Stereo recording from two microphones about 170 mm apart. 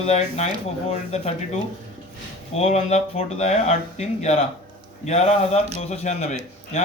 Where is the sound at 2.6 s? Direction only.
40° left (ahead or behind).